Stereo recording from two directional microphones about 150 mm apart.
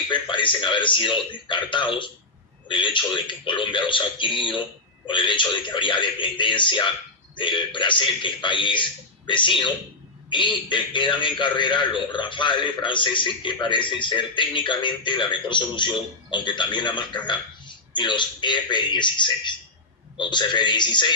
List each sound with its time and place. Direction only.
0.1 s a man's voice: 35° left (ahead or behind)